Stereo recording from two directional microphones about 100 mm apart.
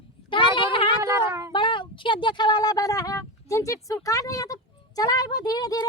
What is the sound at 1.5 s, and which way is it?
Speech, 55° left (ahead or behind).